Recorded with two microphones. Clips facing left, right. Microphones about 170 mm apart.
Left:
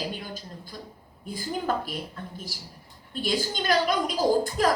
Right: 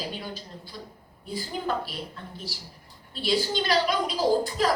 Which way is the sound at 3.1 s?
45° left (ahead or behind).